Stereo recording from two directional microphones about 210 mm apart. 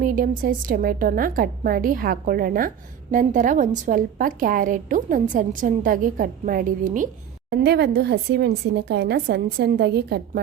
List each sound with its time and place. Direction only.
0.0 s a woman's voice: 40° right (ahead or behind)
7.5 s a woman's voice: 50° right (ahead or behind)